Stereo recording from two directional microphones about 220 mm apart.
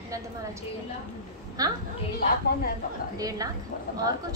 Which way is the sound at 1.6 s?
15° right (ahead or behind).